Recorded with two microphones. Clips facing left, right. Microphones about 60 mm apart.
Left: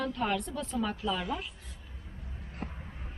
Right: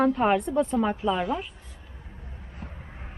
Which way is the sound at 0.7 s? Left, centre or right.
Right.